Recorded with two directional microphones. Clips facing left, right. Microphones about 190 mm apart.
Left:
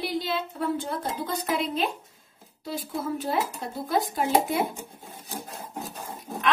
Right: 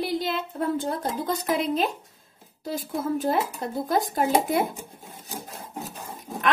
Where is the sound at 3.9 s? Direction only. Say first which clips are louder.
Right 1 dB; 45° right (ahead or behind).